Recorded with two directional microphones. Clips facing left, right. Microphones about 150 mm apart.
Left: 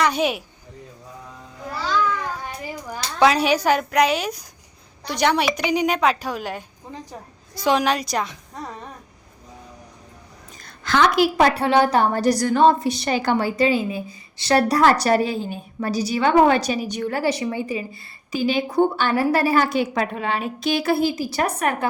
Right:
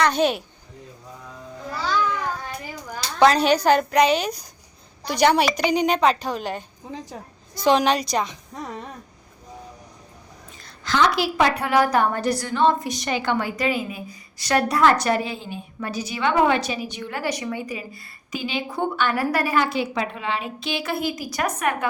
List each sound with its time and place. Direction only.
0.0 s a woman's voice: 5° left (ahead or behind)
3.2 s a woman's voice: 5° left (ahead or behind)
10.6 s a woman's voice: 55° left (ahead or behind)
11.5 s a woman's voice: 30° left (ahead or behind)
19.5 s a woman's voice: 45° left (ahead or behind)